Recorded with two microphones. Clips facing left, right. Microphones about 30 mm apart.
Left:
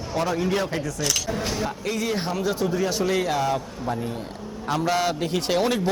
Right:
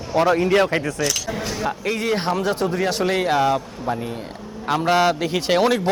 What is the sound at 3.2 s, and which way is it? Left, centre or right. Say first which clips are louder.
A man's voice: right 5 dB; right.